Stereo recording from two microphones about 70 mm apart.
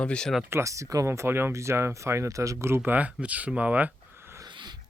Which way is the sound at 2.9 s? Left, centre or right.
Right.